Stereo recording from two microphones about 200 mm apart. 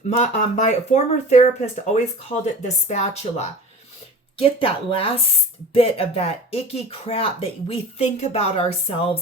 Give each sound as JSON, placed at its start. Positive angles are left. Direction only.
{"t": 0.2, "sound": "speech", "side_deg": 35}